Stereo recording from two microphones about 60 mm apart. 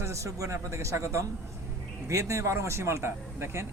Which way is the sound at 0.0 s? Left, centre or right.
Right.